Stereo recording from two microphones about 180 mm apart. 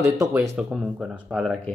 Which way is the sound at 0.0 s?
15° right (ahead or behind).